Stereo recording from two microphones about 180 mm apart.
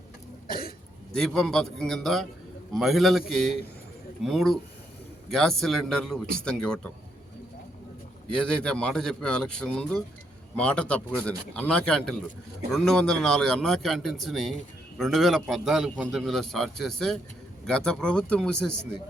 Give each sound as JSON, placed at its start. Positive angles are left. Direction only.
{"t": 0.4, "sound": "cough", "side_deg": 55}
{"t": 1.1, "sound": "a man's voice", "side_deg": 0}
{"t": 8.3, "sound": "a man's voice", "side_deg": 5}